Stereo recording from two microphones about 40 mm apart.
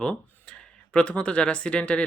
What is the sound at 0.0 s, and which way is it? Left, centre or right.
Speech, left.